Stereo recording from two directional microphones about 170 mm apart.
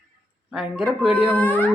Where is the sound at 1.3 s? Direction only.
10° left (ahead or behind).